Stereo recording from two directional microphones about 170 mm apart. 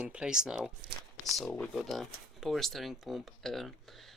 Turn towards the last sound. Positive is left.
turn(degrees=0)  # may be behind; listen again after turning